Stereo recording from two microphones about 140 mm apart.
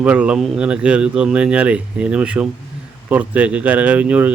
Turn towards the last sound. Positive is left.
turn(degrees=-10)  # may be behind; listen again after turning